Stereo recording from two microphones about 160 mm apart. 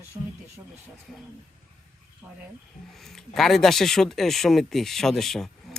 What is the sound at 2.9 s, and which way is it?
Speech, centre (ahead or behind).